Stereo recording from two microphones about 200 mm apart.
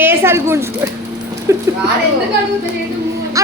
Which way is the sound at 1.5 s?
15° right (ahead or behind).